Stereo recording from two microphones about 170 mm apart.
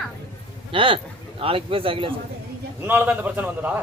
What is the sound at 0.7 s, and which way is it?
A man's voice, 30° right (ahead or behind).